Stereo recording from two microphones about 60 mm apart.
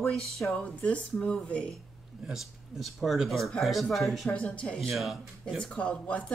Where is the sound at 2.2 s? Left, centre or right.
Centre.